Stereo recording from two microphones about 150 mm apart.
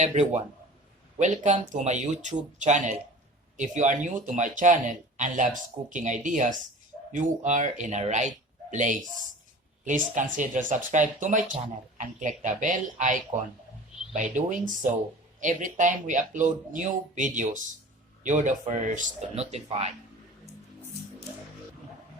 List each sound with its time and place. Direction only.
0.0 s speech: 50° right (ahead or behind)
1.7 s speech: 55° right (ahead or behind)
19.3 s speech: 45° right (ahead or behind)